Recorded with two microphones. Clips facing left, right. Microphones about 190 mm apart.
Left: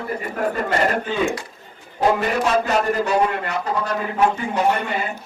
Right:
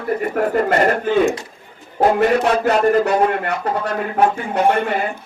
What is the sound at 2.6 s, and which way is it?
A man's voice, 55° right (ahead or behind).